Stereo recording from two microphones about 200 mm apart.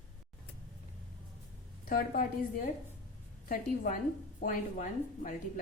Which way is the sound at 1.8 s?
45° left (ahead or behind).